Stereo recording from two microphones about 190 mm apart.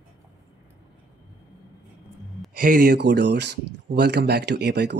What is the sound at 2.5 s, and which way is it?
Speech, 45° right (ahead or behind).